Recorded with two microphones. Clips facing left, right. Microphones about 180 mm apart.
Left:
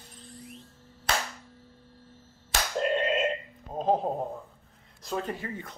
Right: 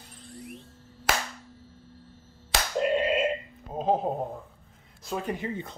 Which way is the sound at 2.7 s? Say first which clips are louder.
Right 2 dB; 5° right (ahead or behind).